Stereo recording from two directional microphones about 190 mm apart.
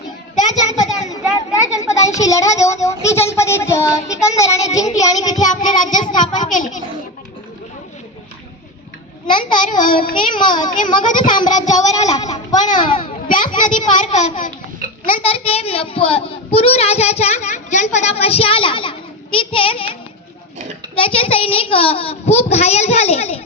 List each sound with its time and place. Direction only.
0.3 s a sound: 20° left (ahead or behind)
2.8 s child singing: 15° left (ahead or behind)
4.9 s a child's voice: 20° left (ahead or behind)
5.3 s a child's voice: 40° left (ahead or behind)
9.4 s a child's voice: 45° left (ahead or behind)
10.2 s a child's voice: 25° left (ahead or behind)
10.9 s a child's voice: 45° left (ahead or behind)
11.3 s a child's voice: 25° left (ahead or behind)
11.6 s a child's voice: 40° left (ahead or behind)
12.1 s a child's voice: 20° left (ahead or behind)
12.8 s a child's voice: 45° left (ahead or behind)